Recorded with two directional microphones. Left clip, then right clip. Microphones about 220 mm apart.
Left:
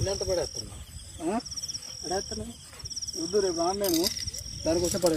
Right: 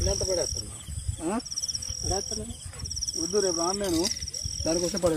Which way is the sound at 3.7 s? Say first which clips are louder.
Left 1 dB; 10° right (ahead or behind).